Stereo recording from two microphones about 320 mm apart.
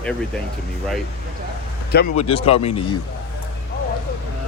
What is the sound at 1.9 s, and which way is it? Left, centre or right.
Speech, left.